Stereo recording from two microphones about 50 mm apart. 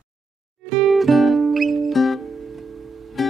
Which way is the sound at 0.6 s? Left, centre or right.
Centre.